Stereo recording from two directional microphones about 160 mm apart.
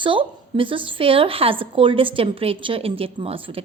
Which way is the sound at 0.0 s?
30° right (ahead or behind).